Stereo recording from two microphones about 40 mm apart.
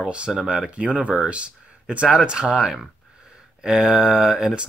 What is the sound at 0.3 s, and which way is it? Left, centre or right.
Speech, centre.